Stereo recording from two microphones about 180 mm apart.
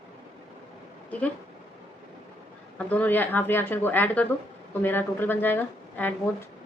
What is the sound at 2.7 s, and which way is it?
Speech, 10° left (ahead or behind).